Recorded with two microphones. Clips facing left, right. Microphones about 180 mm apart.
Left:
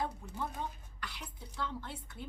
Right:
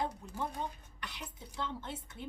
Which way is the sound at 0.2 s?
20° right (ahead or behind).